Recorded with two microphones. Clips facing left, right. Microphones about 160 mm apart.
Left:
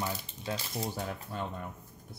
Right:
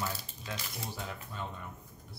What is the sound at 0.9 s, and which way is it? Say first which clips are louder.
Speech: left 5 dB; 45° left (ahead or behind).